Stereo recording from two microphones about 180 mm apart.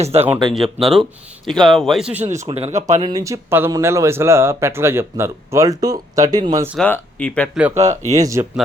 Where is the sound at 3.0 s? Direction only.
20° right (ahead or behind).